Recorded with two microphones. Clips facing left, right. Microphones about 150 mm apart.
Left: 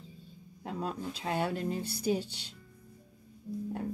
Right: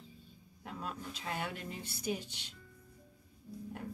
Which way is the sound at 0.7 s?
30° left (ahead or behind).